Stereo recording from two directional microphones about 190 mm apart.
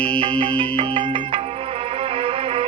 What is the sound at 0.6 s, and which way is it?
Music, 25° right (ahead or behind).